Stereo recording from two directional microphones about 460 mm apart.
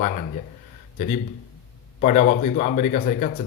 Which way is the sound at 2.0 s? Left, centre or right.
Centre.